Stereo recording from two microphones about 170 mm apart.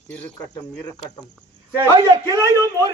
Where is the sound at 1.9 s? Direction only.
20° right (ahead or behind).